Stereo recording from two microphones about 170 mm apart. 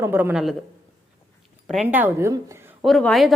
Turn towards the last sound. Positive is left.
turn(degrees=0)  # may be behind; listen again after turning